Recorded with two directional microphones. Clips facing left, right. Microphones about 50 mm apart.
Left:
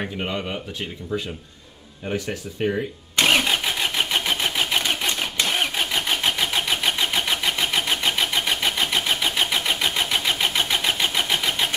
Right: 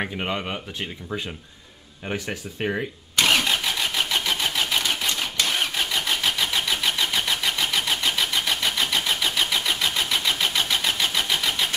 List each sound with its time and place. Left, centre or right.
0.0 s speech: centre
3.2 s vehicle: left